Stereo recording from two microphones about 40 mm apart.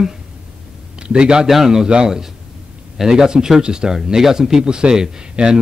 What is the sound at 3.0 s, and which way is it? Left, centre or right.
Speech, centre.